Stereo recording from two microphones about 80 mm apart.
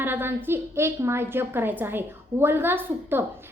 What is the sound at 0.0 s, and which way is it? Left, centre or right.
A woman's voice, right.